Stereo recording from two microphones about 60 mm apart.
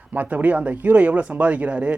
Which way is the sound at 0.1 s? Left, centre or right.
Right.